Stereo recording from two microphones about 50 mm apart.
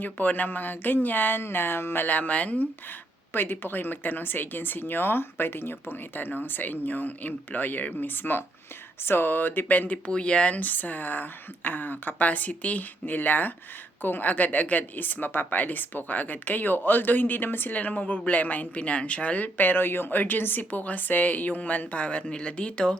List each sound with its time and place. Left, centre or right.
0.0 s a woman's voice: left
3.3 s a woman's voice: left
10.1 s a woman's voice: left